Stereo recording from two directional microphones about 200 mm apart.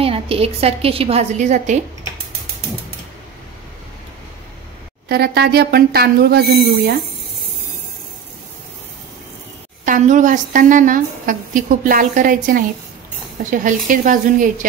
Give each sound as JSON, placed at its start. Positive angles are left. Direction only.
{"t": 0.0, "sound": "a woman's voice", "side_deg": -30}
{"t": 5.0, "sound": "a woman's voice", "side_deg": -50}
{"t": 9.8, "sound": "a woman's voice", "side_deg": -40}